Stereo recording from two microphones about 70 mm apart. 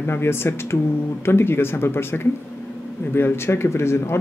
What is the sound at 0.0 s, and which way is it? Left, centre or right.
Speech, left.